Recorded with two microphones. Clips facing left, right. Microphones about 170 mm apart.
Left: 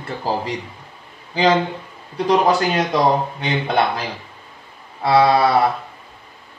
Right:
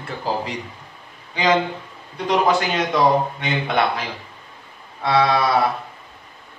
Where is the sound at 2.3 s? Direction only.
35° left (ahead or behind).